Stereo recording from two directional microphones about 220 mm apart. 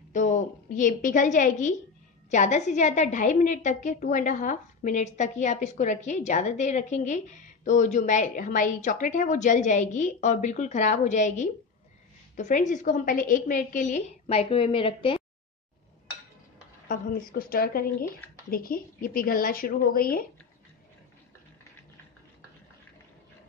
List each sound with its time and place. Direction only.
0.1 s a woman's voice: 35° left (ahead or behind)
16.8 s a woman's voice: 40° left (ahead or behind)